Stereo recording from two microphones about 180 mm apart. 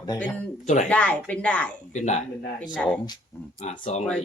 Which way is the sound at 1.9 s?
40° left (ahead or behind).